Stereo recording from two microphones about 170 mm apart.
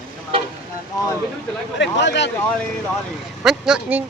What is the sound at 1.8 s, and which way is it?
Speech, 90° left.